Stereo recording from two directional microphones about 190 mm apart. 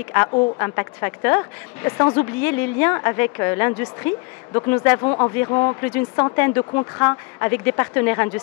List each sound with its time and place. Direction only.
0.6 s a woman's voice: 15° left (ahead or behind)
6.6 s a woman's voice: 20° left (ahead or behind)